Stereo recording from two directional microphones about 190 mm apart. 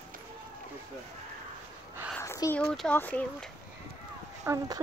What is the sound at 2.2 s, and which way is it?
Speech, 15° left (ahead or behind).